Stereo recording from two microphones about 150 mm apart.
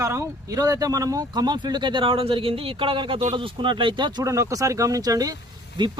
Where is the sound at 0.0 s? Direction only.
20° right (ahead or behind).